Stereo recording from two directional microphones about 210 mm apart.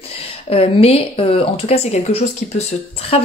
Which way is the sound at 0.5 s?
30° left (ahead or behind).